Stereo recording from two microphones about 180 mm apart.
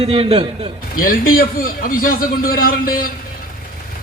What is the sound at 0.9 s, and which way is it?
A man's voice, 50° left (ahead or behind).